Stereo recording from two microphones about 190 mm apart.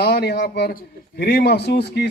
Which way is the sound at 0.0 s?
60° left (ahead or behind).